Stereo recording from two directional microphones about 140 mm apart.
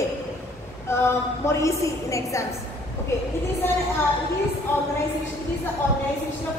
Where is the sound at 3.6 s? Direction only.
15° left (ahead or behind).